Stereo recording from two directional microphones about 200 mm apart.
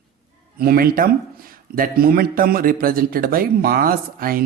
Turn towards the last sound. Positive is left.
turn(degrees=-45)  # may be behind; listen again after turning